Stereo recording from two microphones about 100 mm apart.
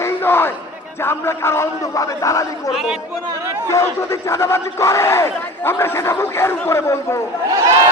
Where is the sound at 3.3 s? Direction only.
30° right (ahead or behind).